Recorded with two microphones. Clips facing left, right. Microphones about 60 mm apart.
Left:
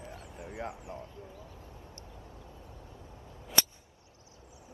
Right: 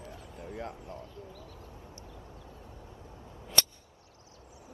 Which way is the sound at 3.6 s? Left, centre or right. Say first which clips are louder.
Even; centre.